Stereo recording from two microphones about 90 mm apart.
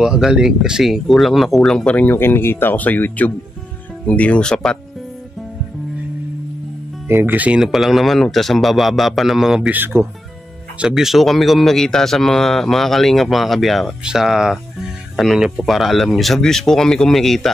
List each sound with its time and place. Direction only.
0.0 s speech: 5° right (ahead or behind)
1.9 s speech: 20° left (ahead or behind)
7.1 s speech: 25° right (ahead or behind)
7.6 s speech: 5° right (ahead or behind)
9.7 s speech: 20° right (ahead or behind)
10.8 s speech: 5° right (ahead or behind)